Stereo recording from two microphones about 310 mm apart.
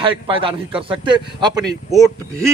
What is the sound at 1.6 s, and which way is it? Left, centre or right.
Speech, centre.